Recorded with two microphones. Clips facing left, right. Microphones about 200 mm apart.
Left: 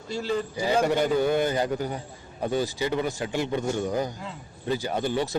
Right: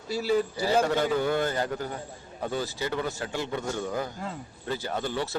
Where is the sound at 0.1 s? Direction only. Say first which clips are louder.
Right 2 dB; 5° right (ahead or behind).